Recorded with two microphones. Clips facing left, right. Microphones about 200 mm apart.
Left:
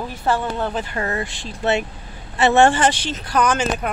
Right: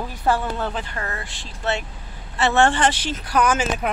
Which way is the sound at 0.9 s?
20° left (ahead or behind).